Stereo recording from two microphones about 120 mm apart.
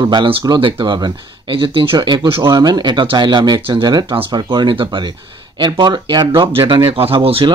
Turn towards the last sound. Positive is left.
turn(degrees=-50)  # may be behind; listen again after turning